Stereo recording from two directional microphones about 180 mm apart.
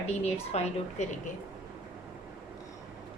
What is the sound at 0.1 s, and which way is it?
Speech, 35° left (ahead or behind).